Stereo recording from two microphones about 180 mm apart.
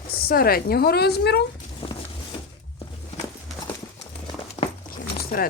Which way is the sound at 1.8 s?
30° left (ahead or behind).